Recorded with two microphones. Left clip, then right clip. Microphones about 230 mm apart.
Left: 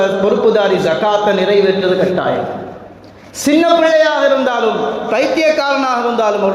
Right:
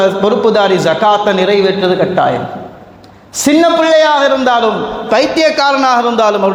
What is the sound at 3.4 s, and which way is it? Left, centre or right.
A man's voice, right.